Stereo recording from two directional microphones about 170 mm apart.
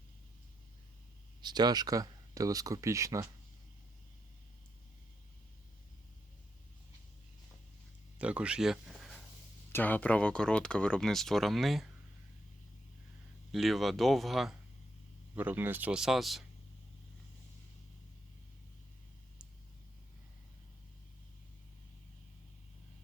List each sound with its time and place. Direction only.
1.4 s speech: 25° right (ahead or behind)
8.2 s speech: 5° right (ahead or behind)
9.7 s speech: 10° left (ahead or behind)
13.5 s speech: centre (ahead or behind)